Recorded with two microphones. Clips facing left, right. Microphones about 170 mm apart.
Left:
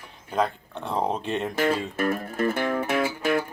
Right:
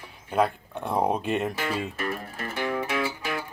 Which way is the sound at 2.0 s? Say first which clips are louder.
Left 7 dB; 50° left (ahead or behind).